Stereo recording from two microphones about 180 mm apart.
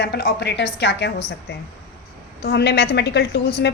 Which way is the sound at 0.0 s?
65° left (ahead or behind).